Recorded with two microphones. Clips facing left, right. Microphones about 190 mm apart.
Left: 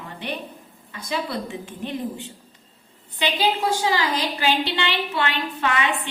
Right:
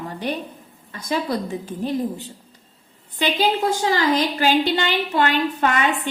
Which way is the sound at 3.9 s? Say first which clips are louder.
Right 4 dB; 45° right (ahead or behind).